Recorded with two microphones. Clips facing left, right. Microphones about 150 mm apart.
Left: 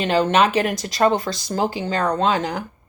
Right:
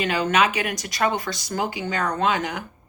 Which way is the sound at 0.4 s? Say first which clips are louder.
Left 5 dB; 50° left (ahead or behind).